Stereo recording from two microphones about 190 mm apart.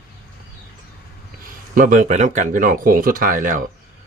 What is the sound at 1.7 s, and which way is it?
Speech, 45° right (ahead or behind).